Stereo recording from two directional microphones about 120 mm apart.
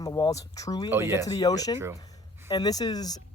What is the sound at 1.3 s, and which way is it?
Speech, 30° left (ahead or behind).